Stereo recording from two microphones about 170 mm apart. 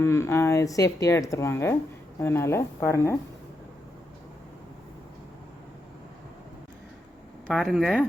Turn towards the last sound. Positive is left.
turn(degrees=0)  # may be behind; listen again after turning